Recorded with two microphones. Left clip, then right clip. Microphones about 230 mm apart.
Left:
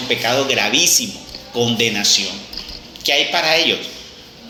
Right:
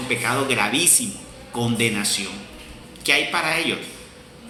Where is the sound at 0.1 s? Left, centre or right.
Centre.